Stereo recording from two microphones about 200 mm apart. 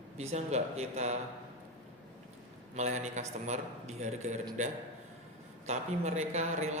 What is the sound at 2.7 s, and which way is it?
A man's voice, 35° right (ahead or behind).